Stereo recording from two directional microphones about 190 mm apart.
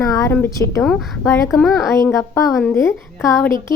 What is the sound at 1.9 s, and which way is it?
A woman's voice, 15° left (ahead or behind).